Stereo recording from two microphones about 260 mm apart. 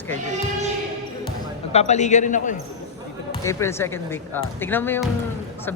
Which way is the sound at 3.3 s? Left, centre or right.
Centre.